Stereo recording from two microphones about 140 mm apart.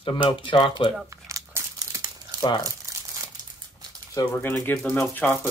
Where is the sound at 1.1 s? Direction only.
20° right (ahead or behind).